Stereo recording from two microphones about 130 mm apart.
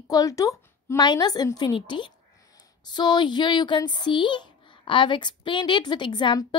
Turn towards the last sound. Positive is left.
turn(degrees=35)  # may be behind; listen again after turning